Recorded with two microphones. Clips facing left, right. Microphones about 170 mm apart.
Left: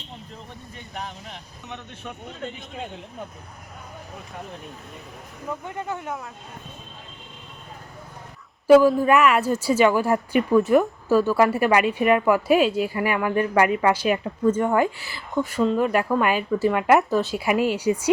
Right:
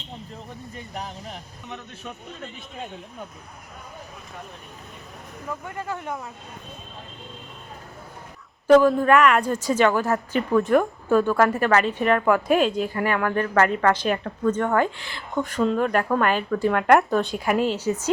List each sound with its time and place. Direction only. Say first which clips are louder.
0.9 s speech: even; 35° right (ahead or behind)
5.6 s speech: even; 20° left (ahead or behind)
8.6 s a woman's voice: left 1 dB; 5° left (ahead or behind)